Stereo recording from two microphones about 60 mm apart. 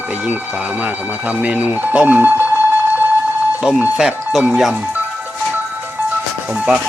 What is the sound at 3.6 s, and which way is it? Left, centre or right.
Speech, centre.